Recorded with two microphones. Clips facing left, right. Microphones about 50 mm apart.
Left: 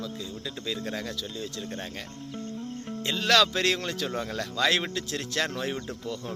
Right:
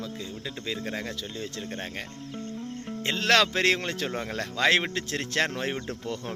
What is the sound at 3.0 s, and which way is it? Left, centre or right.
Speech, right.